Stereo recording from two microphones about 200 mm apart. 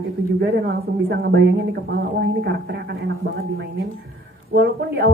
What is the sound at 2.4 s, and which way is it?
Speech, 55° right (ahead or behind).